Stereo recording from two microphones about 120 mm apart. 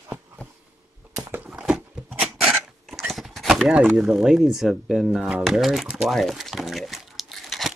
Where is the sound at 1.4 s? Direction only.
10° right (ahead or behind).